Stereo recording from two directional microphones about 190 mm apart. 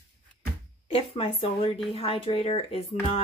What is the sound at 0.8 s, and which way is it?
A woman's voice, 30° left (ahead or behind).